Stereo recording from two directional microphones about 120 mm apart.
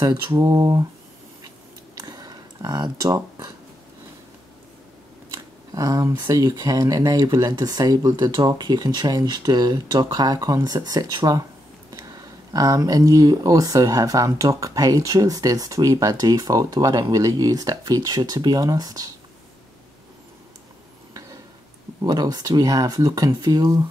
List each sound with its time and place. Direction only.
0.0 s speech: 30° right (ahead or behind)
2.0 s a sound: 30° right (ahead or behind)
5.3 s speech: 30° right (ahead or behind)
12.5 s speech: 30° right (ahead or behind)
22.0 s speech: 35° right (ahead or behind)